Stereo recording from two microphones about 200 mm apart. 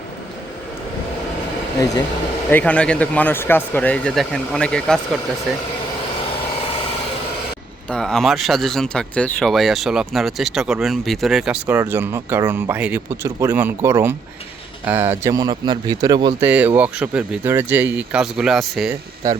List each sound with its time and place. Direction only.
2.5 s speech: 10° left (ahead or behind)
7.9 s speech: 5° left (ahead or behind); by 16.3 s 20° right (ahead or behind)
16.4 s speech: 10° right (ahead or behind)